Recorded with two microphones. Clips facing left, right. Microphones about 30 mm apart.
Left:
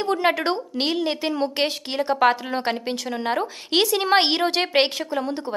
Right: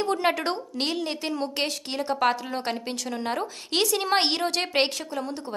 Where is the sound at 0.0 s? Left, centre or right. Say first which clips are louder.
Left 3 dB; centre.